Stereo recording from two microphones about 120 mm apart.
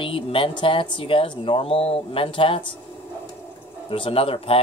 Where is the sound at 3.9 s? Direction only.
50° left (ahead or behind).